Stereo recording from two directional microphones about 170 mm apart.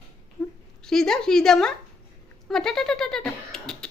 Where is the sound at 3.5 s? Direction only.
5° left (ahead or behind).